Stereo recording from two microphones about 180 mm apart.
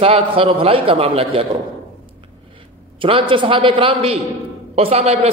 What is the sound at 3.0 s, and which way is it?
A man's voice, 30° right (ahead or behind).